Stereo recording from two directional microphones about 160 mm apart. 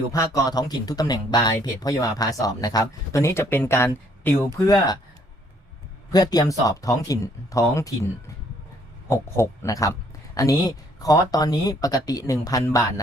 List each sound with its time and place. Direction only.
0.1 s speech: 20° left (ahead or behind)
4.5 s speech: 20° left (ahead or behind)
6.1 s speech: 25° left (ahead or behind)